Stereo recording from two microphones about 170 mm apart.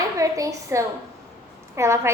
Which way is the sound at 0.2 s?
20° right (ahead or behind).